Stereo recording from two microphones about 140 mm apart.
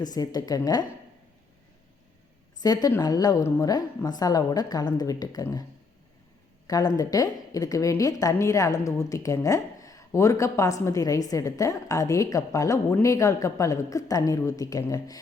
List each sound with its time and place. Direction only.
0.0 s a woman's voice: 25° left (ahead or behind)
2.6 s a woman's voice: 30° left (ahead or behind)
6.7 s a woman's voice: 25° left (ahead or behind)